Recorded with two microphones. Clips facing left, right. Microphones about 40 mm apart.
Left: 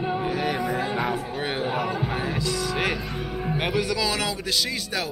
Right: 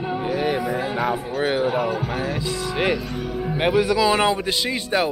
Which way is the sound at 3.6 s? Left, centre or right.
Centre.